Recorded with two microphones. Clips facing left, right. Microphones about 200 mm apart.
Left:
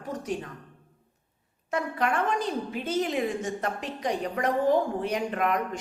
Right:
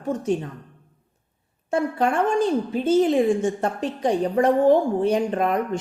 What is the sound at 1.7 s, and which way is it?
A woman's voice, 30° right (ahead or behind).